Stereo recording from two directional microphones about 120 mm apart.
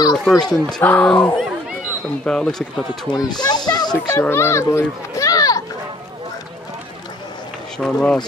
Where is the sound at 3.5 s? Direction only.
35° left (ahead or behind).